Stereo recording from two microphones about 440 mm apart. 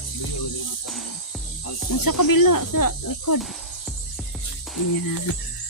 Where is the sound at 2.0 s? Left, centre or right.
Left.